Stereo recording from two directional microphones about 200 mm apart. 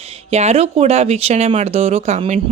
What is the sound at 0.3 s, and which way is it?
A woman's voice, 30° right (ahead or behind).